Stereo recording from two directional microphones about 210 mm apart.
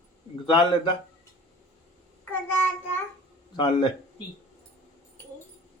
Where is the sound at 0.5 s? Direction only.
20° left (ahead or behind).